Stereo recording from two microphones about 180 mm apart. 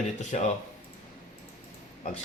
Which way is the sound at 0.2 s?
40° left (ahead or behind).